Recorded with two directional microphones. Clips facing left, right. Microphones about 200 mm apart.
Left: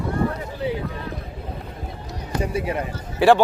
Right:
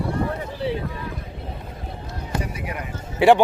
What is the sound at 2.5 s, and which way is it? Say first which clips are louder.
Speech: left 7 dB; 30° left (ahead or behind).